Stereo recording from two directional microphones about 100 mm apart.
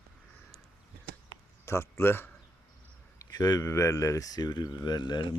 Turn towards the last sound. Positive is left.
turn(degrees=45)  # may be behind; listen again after turning